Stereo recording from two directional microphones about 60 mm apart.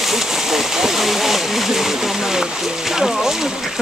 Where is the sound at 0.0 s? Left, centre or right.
Centre.